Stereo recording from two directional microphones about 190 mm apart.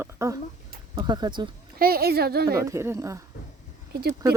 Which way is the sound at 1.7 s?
50° right (ahead or behind).